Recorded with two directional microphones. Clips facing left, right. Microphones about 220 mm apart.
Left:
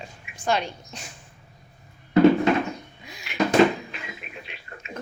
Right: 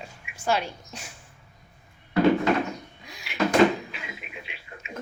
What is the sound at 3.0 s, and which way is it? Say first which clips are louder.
Cupboard open or close: left 2 dB; centre (ahead or behind).